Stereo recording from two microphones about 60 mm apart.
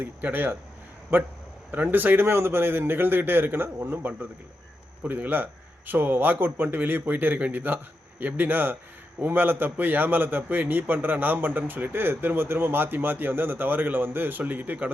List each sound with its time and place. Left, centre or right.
0.0 s a man's voice: right